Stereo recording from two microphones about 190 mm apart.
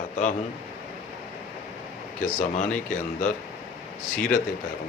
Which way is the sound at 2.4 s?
40° left (ahead or behind).